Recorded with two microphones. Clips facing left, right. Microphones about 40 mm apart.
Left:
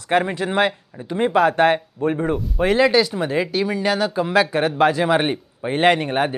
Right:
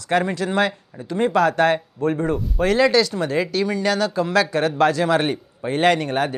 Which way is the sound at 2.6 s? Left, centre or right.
Centre.